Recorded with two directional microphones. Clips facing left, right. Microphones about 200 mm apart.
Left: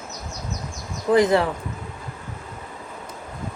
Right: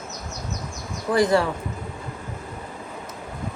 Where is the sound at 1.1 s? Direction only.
20° left (ahead or behind).